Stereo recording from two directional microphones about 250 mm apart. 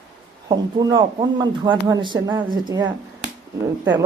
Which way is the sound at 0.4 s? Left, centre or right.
Centre.